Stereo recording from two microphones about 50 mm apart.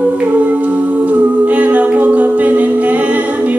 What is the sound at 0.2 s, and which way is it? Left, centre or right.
Humming, right.